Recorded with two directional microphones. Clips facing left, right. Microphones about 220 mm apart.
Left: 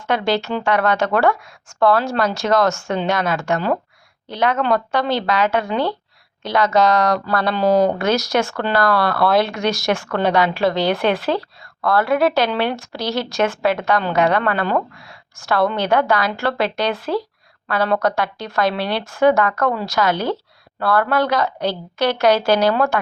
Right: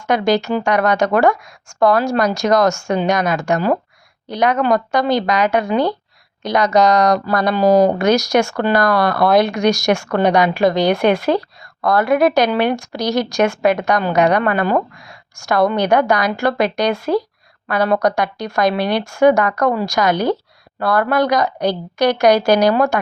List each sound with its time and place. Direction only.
0.1 s speech: 15° right (ahead or behind)